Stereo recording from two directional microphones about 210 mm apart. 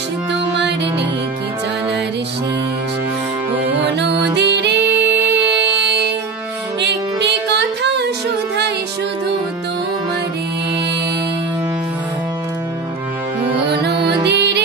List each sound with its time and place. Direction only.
3.5 s music: 10° right (ahead or behind)
3.8 s music: 55° right (ahead or behind)
14.2 s music: 55° right (ahead or behind)